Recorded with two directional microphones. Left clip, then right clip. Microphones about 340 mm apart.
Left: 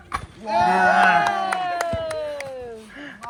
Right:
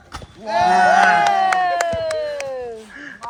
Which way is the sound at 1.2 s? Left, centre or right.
Right.